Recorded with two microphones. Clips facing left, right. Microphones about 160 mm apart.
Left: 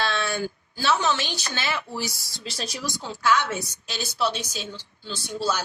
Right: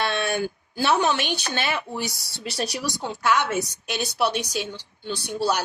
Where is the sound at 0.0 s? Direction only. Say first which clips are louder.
Right 2 dB; 60° right (ahead or behind).